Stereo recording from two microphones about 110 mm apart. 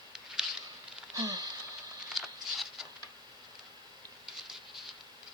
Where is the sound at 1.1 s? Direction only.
35° right (ahead or behind).